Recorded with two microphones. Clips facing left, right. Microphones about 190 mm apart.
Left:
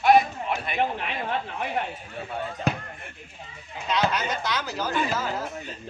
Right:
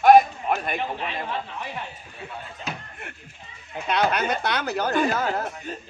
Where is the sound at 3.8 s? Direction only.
60° right (ahead or behind).